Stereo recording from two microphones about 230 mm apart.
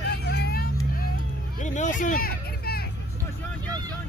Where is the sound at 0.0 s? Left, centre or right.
Left.